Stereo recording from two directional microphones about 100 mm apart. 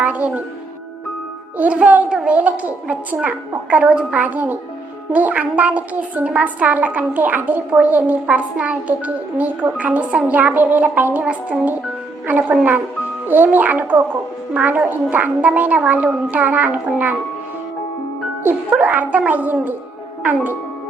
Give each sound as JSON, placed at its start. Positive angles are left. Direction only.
{"t": 0.0, "sound": "music", "side_deg": -15}
{"t": 1.5, "sound": "a woman's voice", "side_deg": -15}
{"t": 18.4, "sound": "a woman's voice", "side_deg": -15}